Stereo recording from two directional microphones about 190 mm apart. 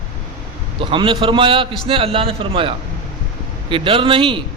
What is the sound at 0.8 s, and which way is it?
A man's voice, 25° right (ahead or behind).